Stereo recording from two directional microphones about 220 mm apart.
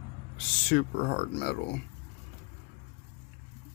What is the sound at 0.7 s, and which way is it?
A man's voice, 55° left (ahead or behind).